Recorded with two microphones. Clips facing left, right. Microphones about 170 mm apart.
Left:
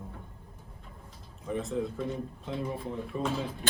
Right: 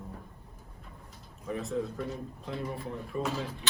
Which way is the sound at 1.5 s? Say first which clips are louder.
Left 1 dB; centre (ahead or behind).